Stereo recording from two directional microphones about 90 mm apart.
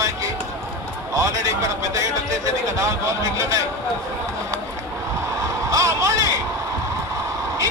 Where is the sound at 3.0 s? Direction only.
35° right (ahead or behind).